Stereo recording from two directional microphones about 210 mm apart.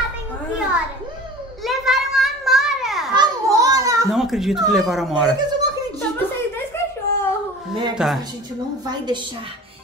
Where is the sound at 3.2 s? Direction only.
15° right (ahead or behind).